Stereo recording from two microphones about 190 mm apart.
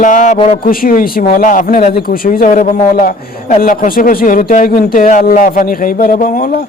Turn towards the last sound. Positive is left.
turn(degrees=45)  # may be behind; listen again after turning